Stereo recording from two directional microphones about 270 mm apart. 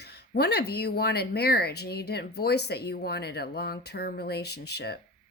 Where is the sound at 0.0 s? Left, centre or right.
Left.